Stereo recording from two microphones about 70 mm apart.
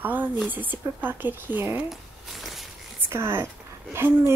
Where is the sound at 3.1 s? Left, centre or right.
Right.